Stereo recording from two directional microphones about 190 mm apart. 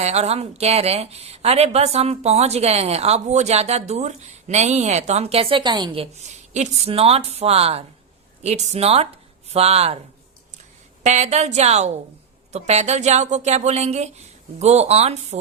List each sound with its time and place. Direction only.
0.0 s a woman's voice: 35° right (ahead or behind)
11.0 s a woman's voice: 35° right (ahead or behind)